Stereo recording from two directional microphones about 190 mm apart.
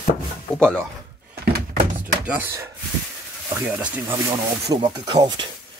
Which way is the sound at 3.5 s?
10° right (ahead or behind).